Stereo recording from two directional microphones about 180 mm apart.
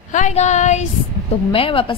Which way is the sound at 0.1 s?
40° left (ahead or behind).